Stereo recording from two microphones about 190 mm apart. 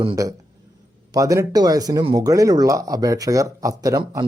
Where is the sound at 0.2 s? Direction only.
15° right (ahead or behind).